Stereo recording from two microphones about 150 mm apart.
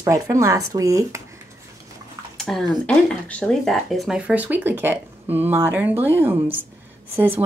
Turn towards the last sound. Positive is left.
turn(degrees=-15)  # may be behind; listen again after turning